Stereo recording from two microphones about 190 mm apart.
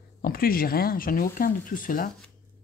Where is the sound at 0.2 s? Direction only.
50° left (ahead or behind).